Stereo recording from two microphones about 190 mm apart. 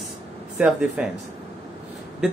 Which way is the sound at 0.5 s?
5° right (ahead or behind).